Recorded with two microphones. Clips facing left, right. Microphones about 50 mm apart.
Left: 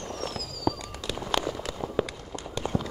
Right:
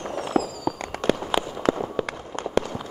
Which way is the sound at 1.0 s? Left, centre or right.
Right.